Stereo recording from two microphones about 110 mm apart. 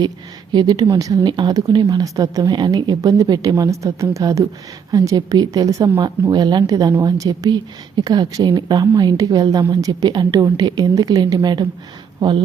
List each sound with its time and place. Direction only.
0.5 s speech: 40° right (ahead or behind)